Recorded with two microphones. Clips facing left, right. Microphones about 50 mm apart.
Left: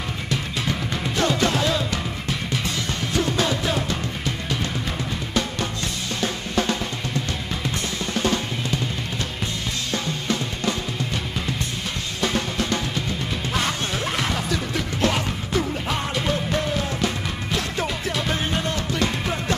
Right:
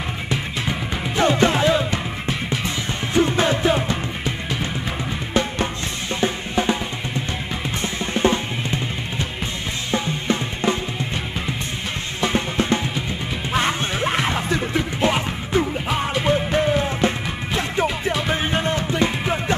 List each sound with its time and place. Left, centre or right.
0.3 s music: right
9.8 s drum: right
12.2 s music: right